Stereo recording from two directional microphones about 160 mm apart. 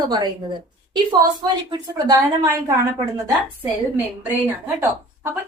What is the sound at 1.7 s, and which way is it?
A woman's voice, 25° right (ahead or behind).